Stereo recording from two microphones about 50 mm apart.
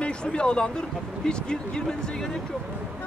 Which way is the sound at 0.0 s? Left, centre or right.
Centre.